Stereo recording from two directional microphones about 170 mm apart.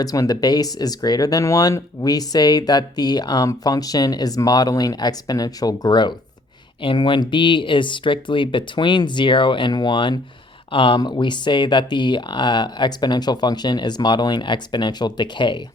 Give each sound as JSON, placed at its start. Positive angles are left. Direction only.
{"t": 0.0, "sound": "speech", "side_deg": 20}